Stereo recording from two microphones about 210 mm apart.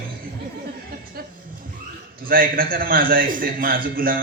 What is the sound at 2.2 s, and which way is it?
A man's voice, 45° right (ahead or behind).